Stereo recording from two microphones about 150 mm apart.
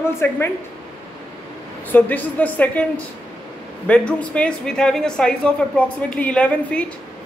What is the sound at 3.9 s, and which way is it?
Speech, 10° left (ahead or behind).